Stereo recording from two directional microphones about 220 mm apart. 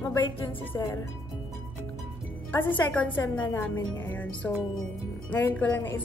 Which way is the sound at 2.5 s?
10° left (ahead or behind).